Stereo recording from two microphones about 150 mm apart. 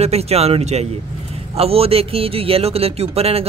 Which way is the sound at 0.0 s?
45° right (ahead or behind).